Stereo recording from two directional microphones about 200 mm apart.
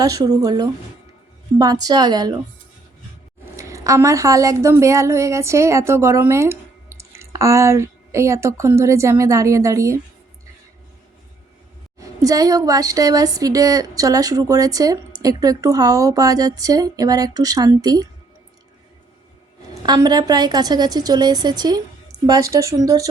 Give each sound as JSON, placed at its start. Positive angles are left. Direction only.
{"t": 0.0, "sound": "a woman's voice", "side_deg": -20}
{"t": 3.6, "sound": "a woman's voice", "side_deg": -15}
{"t": 11.9, "sound": "a woman's voice", "side_deg": -15}
{"t": 19.8, "sound": "a woman's voice", "side_deg": -20}